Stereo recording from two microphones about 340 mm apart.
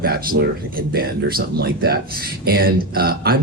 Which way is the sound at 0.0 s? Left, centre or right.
Right.